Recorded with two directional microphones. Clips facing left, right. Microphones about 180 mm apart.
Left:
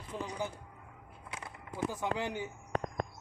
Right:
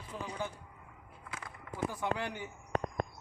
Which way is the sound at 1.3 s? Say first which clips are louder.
Even; 20° left (ahead or behind).